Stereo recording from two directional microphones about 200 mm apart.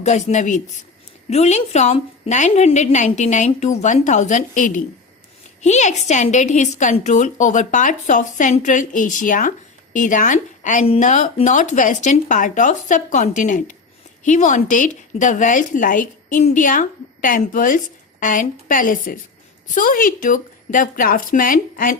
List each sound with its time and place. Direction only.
0.0 s a woman's voice: 35° left (ahead or behind)